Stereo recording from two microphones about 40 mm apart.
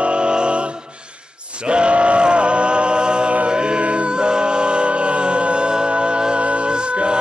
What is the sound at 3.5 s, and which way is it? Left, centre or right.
Music, right.